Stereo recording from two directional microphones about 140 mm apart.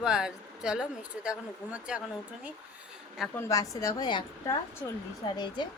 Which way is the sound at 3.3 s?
25° left (ahead or behind).